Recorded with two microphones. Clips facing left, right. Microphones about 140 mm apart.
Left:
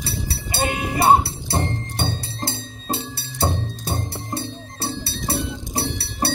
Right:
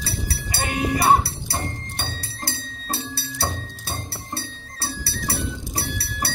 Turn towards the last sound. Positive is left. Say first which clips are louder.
# left 5 dB
turn(degrees=25)  # may be behind; listen again after turning